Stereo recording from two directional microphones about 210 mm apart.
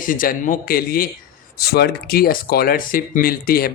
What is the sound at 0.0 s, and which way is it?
Speech, 40° left (ahead or behind).